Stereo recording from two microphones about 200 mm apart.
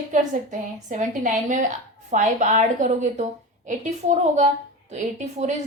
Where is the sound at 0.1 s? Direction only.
40° right (ahead or behind).